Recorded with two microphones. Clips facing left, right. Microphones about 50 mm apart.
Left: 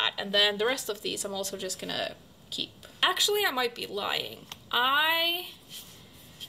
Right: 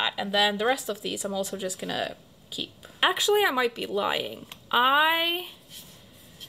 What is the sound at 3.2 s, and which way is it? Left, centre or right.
Speech, right.